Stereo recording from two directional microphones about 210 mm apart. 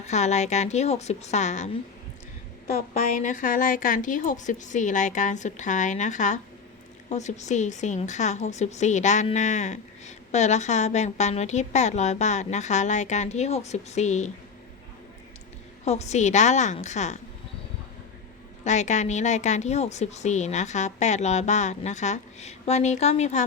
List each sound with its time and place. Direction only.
0.0 s a woman's voice: 35° left (ahead or behind)
2.9 s a woman's voice: 40° left (ahead or behind)
15.8 s a woman's voice: 30° left (ahead or behind)
18.6 s a woman's voice: 35° left (ahead or behind)